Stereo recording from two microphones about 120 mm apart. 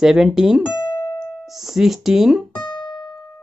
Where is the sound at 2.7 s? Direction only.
40° left (ahead or behind).